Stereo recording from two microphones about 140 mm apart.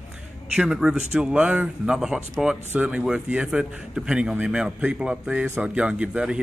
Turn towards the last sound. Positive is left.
turn(degrees=-5)  # may be behind; listen again after turning